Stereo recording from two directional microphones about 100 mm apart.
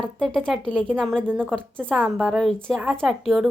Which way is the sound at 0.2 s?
5° right (ahead or behind).